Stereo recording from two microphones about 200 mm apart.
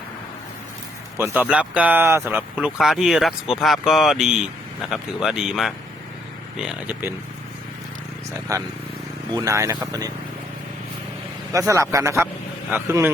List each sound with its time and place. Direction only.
1.1 s speech: 10° right (ahead or behind)
9.3 s speech: 15° right (ahead or behind)
11.5 s speech: 15° right (ahead or behind)